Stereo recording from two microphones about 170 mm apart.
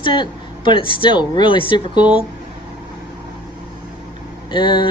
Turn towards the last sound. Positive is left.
turn(degrees=25)  # may be behind; listen again after turning